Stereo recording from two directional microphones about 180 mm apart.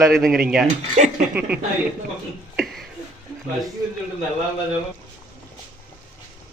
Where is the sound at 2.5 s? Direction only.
Centre (ahead or behind).